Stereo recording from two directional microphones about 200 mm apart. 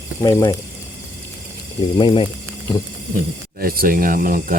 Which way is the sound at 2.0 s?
25° left (ahead or behind).